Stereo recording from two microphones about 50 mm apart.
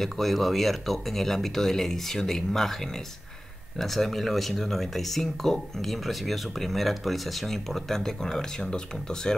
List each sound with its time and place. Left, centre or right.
0.0 s speech: centre